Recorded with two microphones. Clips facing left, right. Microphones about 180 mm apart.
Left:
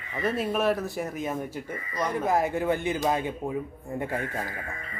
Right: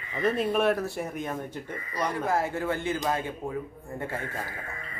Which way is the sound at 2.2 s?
15° left (ahead or behind).